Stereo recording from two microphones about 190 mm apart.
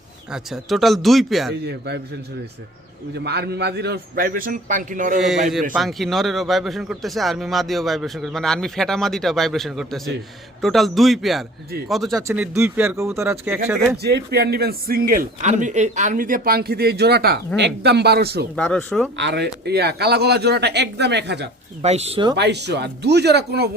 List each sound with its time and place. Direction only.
0.5 s a man's voice: centre (ahead or behind)
3.2 s a man's voice: 60° right (ahead or behind); by 5.1 s 45° right (ahead or behind)
5.7 s a man's voice: centre (ahead or behind)
12.3 s speech: 10° right (ahead or behind)
13.9 s a man's voice: 60° right (ahead or behind)
18.5 s a man's voice: 5° left (ahead or behind)
19.1 s speech: 65° right (ahead or behind)
21.8 s speech: 35° right (ahead or behind)
22.4 s speech: 65° right (ahead or behind)